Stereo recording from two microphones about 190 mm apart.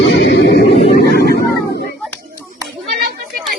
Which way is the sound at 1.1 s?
55° left (ahead or behind).